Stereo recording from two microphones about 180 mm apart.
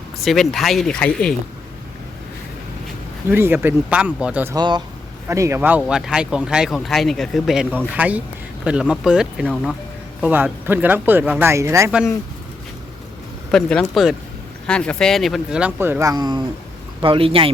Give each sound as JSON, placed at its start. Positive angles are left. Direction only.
{"t": 0.3, "sound": "speech", "side_deg": 0}
{"t": 3.2, "sound": "speech", "side_deg": -10}
{"t": 4.5, "sound": "a man's voice", "side_deg": -25}
{"t": 13.5, "sound": "a man's voice", "side_deg": 5}